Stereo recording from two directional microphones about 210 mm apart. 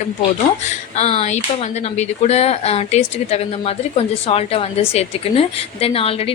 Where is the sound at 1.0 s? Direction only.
30° left (ahead or behind).